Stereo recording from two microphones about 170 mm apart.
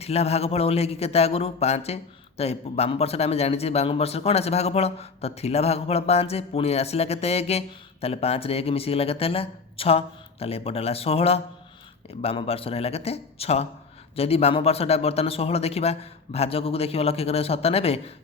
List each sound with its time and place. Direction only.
0.0 s a man's voice: 35° left (ahead or behind)